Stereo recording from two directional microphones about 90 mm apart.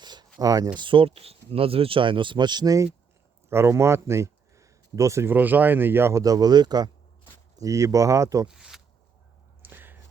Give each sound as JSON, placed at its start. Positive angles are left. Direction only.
{"t": 0.0, "sound": "a sound", "side_deg": -55}
{"t": 0.3, "sound": "speech", "side_deg": -45}
{"t": 0.8, "sound": "speech", "side_deg": -70}
{"t": 3.5, "sound": "speech", "side_deg": -30}
{"t": 6.2, "sound": "speech", "side_deg": -45}
{"t": 7.5, "sound": "speech", "side_deg": -40}
{"t": 8.4, "sound": "zipper", "side_deg": -5}
{"t": 9.6, "sound": "a sound", "side_deg": -20}